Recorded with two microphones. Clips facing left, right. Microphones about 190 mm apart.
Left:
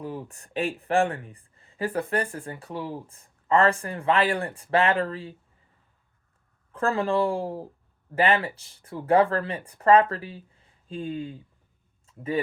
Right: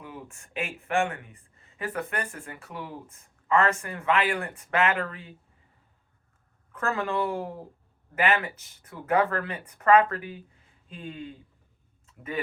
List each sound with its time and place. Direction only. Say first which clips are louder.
0.0 s speech: left 7 dB; 35° left (ahead or behind)
6.7 s speech: left 4 dB; 30° left (ahead or behind)